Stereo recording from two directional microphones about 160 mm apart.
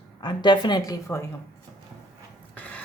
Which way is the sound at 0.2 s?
30° left (ahead or behind).